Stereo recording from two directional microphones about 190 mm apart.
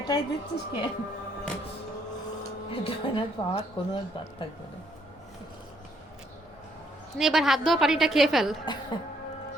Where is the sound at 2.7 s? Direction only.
30° left (ahead or behind).